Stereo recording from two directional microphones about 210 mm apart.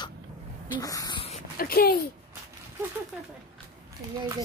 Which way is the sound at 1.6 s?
45° left (ahead or behind).